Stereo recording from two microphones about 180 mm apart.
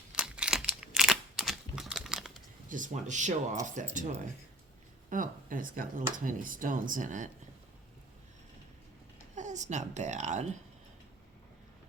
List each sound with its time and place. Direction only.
0.3 s computer keyboard: 5° right (ahead or behind)
2.6 s speech: 45° right (ahead or behind)
9.3 s a child's voice: 40° right (ahead or behind)